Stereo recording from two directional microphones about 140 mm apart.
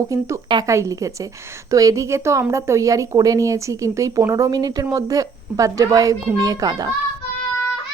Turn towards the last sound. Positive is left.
turn(degrees=-25)  # may be behind; listen again after turning